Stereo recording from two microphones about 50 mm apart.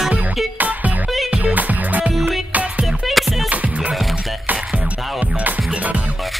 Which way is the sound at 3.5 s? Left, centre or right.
Right.